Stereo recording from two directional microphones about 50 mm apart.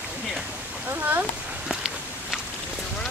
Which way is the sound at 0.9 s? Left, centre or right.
Right.